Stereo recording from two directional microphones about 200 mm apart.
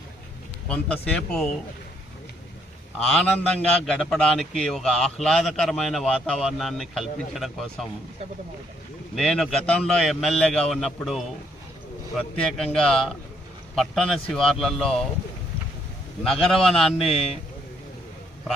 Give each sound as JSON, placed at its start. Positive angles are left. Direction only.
{"t": 1.1, "sound": "a man's voice", "side_deg": 0}
{"t": 3.2, "sound": "a man's voice", "side_deg": 5}
{"t": 9.1, "sound": "a man's voice", "side_deg": 0}
{"t": 16.2, "sound": "a man's voice", "side_deg": 0}
{"t": 17.1, "sound": "a man's voice", "side_deg": 30}